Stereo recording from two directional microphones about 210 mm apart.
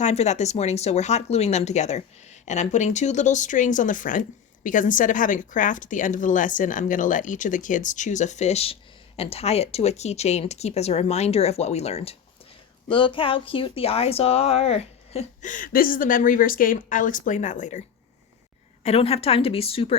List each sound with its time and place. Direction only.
0.0 s speech: 30° left (ahead or behind)